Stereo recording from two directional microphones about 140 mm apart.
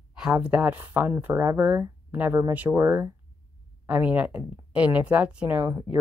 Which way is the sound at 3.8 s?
10° right (ahead or behind).